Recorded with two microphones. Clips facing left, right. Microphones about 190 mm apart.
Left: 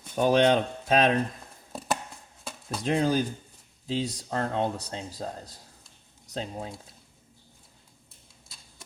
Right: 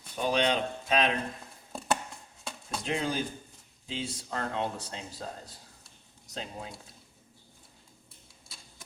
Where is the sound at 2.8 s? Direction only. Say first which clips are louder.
Left 7 dB; 40° left (ahead or behind).